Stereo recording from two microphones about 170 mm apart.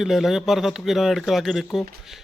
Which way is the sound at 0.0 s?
Centre (ahead or behind).